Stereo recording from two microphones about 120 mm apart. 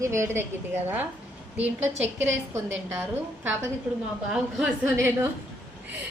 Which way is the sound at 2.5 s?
20° right (ahead or behind).